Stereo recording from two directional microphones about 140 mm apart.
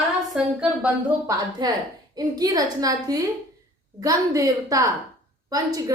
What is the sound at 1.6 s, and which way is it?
A woman's voice, 30° right (ahead or behind).